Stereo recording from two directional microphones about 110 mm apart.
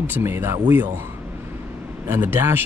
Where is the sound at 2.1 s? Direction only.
20° right (ahead or behind).